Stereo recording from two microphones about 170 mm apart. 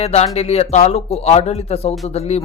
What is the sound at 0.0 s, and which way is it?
Speech, 40° left (ahead or behind).